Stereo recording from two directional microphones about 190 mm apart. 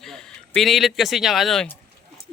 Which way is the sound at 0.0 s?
Centre (ahead or behind).